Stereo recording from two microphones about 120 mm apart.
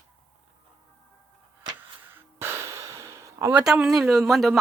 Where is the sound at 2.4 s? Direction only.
20° right (ahead or behind).